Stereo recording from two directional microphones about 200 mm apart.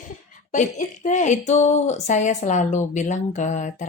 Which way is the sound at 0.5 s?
40° left (ahead or behind).